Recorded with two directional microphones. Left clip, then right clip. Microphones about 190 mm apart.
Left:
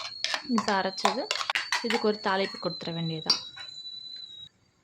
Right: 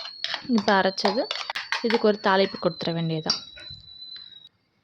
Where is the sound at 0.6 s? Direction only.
20° right (ahead or behind).